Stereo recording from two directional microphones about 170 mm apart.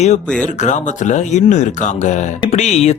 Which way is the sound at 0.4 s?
45° left (ahead or behind).